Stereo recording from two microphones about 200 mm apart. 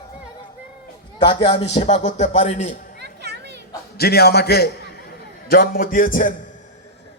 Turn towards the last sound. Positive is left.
turn(degrees=45)  # may be behind; listen again after turning